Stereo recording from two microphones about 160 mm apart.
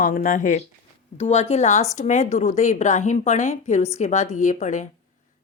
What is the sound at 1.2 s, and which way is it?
A woman's voice, 40° left (ahead or behind).